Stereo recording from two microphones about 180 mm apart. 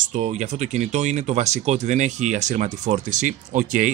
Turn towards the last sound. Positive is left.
turn(degrees=-45)  # may be behind; listen again after turning